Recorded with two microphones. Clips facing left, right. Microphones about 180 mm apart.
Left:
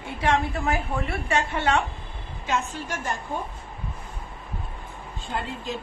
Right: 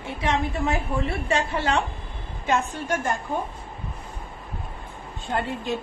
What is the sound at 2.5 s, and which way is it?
Speech, 55° right (ahead or behind).